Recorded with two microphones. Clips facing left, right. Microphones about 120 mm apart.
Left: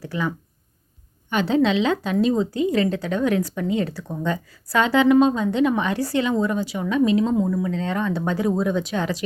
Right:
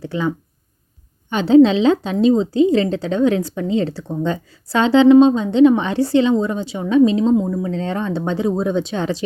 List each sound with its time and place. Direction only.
0.0 s a woman's voice: 25° right (ahead or behind)